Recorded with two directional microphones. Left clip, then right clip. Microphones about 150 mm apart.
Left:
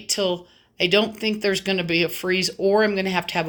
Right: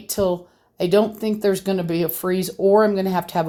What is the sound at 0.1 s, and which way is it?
Speech, 35° right (ahead or behind).